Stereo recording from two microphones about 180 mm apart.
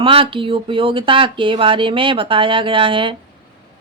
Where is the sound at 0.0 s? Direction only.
30° right (ahead or behind).